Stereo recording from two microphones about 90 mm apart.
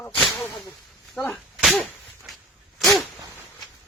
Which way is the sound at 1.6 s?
Centre (ahead or behind).